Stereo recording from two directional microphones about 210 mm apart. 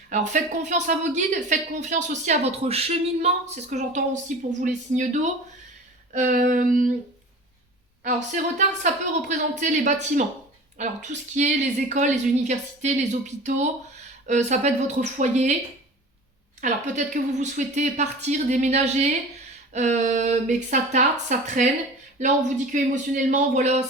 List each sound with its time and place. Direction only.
0.1 s a woman's voice: 35° right (ahead or behind)
8.0 s a woman's voice: 35° right (ahead or behind)
16.6 s a woman's voice: 35° right (ahead or behind)